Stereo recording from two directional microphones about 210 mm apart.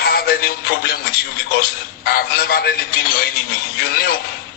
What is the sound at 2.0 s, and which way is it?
Speech, 45° left (ahead or behind).